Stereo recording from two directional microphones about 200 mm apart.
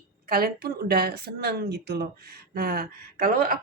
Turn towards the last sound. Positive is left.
turn(degrees=-45)  # may be behind; listen again after turning